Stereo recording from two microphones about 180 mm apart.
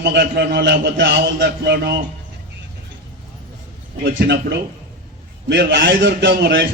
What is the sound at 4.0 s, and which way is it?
A man's voice, 70° right (ahead or behind).